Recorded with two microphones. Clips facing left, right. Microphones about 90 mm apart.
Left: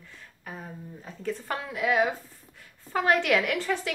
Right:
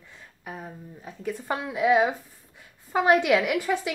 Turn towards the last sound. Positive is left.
turn(degrees=-15)  # may be behind; listen again after turning